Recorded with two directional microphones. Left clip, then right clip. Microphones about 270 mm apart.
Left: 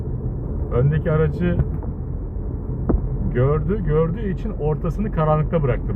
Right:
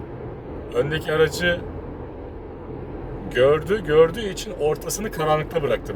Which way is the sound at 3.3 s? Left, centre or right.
Centre.